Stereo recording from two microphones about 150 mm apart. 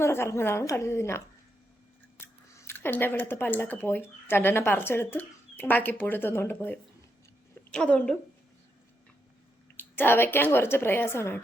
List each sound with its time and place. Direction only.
0.0 s a woman's voice: 15° left (ahead or behind)
9.7 s a woman's voice: 15° left (ahead or behind)